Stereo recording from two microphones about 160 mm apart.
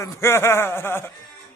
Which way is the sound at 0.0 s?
15° left (ahead or behind).